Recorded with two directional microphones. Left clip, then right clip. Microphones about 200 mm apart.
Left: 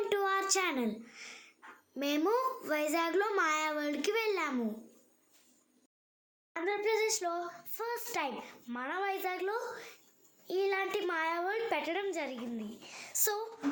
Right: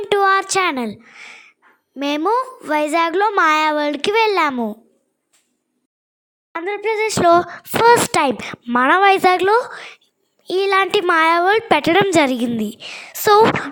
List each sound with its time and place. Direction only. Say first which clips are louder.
0.1 s a sound: right 19 dB; 45° right (ahead or behind)
2.0 s a child's voice: right 13 dB; 40° right (ahead or behind)
6.7 s a child's voice: right 12 dB; 40° right (ahead or behind)